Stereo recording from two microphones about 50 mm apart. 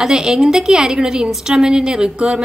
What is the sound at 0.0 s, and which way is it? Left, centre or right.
A woman's voice, centre.